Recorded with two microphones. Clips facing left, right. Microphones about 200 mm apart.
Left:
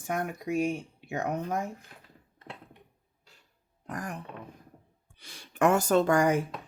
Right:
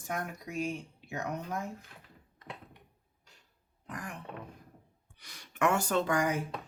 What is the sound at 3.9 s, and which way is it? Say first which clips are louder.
Burping: left 5 dB; 40° left (ahead or behind).